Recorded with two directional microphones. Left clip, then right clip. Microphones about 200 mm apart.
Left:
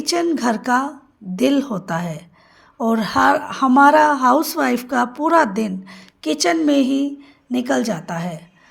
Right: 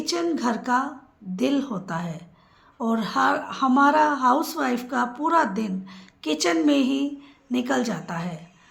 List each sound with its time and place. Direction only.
0.0 s a woman's voice: 40° left (ahead or behind)